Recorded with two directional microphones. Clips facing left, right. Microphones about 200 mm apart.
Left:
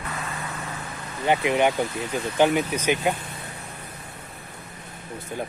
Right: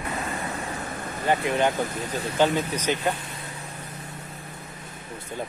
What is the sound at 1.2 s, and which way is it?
Speech, 15° left (ahead or behind).